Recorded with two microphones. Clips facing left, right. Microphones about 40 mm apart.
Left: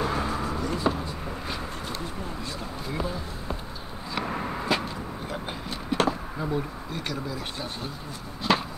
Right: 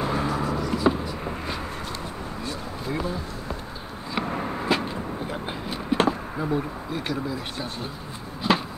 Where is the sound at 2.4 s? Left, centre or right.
Right.